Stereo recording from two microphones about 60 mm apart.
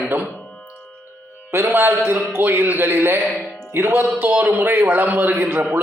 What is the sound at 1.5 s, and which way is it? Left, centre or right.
A man's voice, right.